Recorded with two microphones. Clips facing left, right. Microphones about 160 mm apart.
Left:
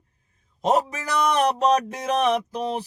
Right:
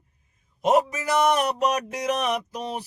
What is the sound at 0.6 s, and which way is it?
Speech, 30° left (ahead or behind).